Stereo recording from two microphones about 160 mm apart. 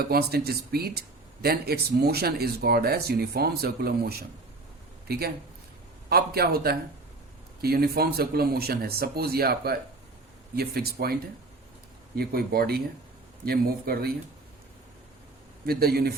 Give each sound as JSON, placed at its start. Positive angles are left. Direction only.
{"t": 0.0, "sound": "speech", "side_deg": -75}
{"t": 15.6, "sound": "speech", "side_deg": -75}